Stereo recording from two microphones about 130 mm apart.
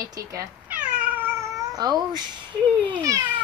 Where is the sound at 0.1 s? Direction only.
25° right (ahead or behind).